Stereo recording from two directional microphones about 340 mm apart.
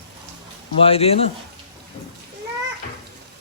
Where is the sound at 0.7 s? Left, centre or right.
Centre.